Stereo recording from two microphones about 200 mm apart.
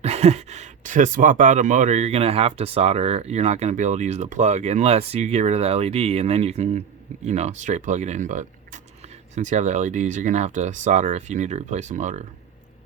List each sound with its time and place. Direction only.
0.0 s speech: 35° right (ahead or behind)